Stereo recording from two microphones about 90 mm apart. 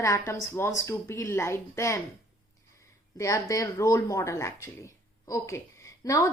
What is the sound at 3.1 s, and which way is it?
Speech, 35° left (ahead or behind).